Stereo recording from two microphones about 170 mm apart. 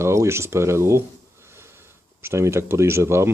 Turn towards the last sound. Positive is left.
turn(degrees=-15)  # may be behind; listen again after turning